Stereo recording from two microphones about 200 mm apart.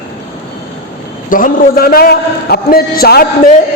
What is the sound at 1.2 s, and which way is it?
A man's voice, 45° left (ahead or behind).